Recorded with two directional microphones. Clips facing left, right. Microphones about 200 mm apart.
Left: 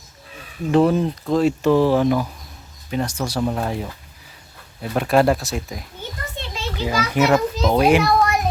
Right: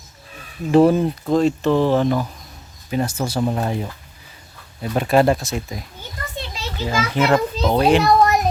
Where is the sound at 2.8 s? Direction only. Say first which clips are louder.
Right 2 dB; 5° right (ahead or behind).